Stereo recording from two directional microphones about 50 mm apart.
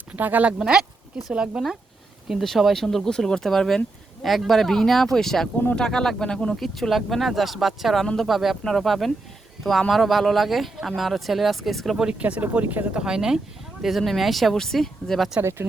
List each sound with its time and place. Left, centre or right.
0.1 s speech: right
0.6 s speech: centre
2.4 s speech: centre
6.6 s speech: centre
12.2 s speech: right
12.9 s speech: centre
13.8 s speech: centre